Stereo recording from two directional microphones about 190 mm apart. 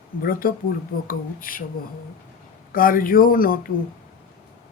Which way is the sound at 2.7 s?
50° left (ahead or behind).